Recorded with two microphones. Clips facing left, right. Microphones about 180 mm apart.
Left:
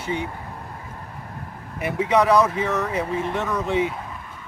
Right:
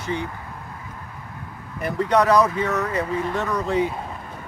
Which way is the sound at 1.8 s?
5° left (ahead or behind).